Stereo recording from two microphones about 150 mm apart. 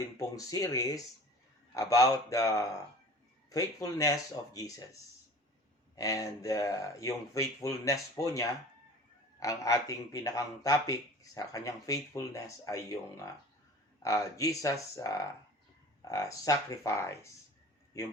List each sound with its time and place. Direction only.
0.0 s speech: 20° left (ahead or behind)
6.0 s speech: 20° left (ahead or behind)